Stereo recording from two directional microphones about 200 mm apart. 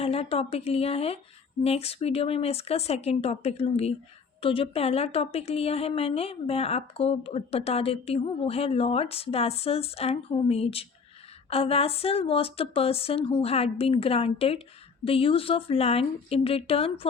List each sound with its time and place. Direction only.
0.0 s a woman's voice: 30° left (ahead or behind)